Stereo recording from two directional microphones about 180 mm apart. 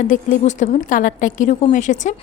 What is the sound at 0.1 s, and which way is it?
A woman's voice, 45° left (ahead or behind).